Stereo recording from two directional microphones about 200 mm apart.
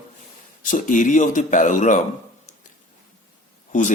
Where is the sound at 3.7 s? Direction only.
40° left (ahead or behind).